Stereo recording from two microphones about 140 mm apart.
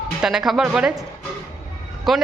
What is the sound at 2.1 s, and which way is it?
Speech, centre (ahead or behind).